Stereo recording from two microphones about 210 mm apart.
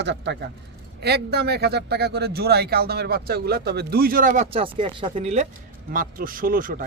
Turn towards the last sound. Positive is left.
turn(degrees=-40)  # may be behind; listen again after turning